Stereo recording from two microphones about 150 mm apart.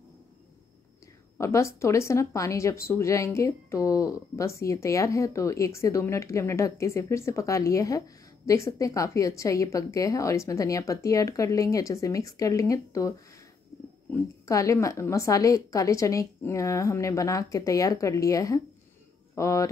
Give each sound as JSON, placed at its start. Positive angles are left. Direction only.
{"t": 1.4, "sound": "a woman's voice", "side_deg": 20}
{"t": 14.4, "sound": "a woman's voice", "side_deg": 20}